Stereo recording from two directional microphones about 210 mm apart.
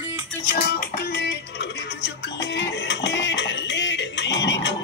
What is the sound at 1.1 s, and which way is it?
Music, 55° left (ahead or behind).